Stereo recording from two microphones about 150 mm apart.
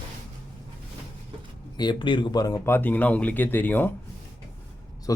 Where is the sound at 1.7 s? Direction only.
30° left (ahead or behind).